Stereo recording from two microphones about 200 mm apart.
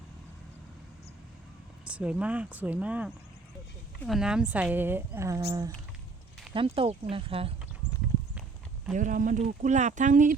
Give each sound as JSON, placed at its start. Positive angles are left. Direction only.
{"t": 1.8, "sound": "speech", "side_deg": -5}
{"t": 9.0, "sound": "speech", "side_deg": -40}